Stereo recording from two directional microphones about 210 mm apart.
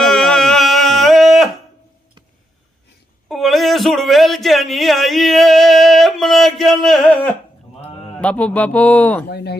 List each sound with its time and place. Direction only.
0.0 s a sound: centre (ahead or behind)
3.2 s speech: centre (ahead or behind)
8.2 s speech: 5° left (ahead or behind)
9.3 s speech: 50° left (ahead or behind)